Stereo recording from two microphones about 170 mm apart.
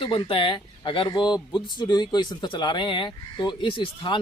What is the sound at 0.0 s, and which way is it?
Speech, 30° left (ahead or behind).